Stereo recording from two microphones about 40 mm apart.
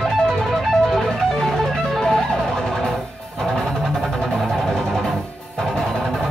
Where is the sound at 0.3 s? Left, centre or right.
Centre.